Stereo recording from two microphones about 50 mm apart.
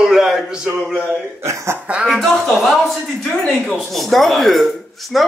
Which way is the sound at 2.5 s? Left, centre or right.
Centre.